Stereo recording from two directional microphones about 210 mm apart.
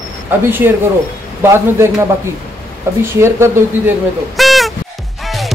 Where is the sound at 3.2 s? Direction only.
10° right (ahead or behind).